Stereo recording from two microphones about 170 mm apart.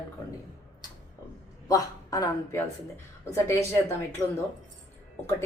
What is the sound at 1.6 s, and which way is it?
A woman's voice, 20° left (ahead or behind).